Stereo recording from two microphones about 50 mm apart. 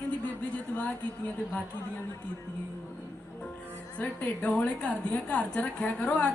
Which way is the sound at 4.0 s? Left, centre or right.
Left.